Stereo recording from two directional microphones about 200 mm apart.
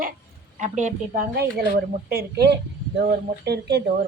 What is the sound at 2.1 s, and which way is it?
A woman's voice, 50° right (ahead or behind).